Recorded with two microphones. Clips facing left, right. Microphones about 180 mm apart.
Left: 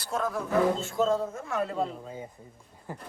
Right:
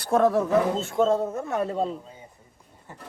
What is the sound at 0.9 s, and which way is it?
Speech, 25° right (ahead or behind).